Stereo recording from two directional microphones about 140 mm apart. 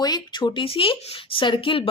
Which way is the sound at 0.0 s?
30° left (ahead or behind).